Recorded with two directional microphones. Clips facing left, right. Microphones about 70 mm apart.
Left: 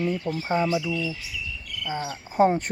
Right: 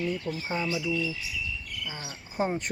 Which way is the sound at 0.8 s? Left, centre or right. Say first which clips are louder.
Left 1 dB; left.